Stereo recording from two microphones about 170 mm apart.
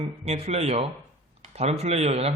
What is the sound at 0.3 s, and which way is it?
A man's voice, 40° right (ahead or behind).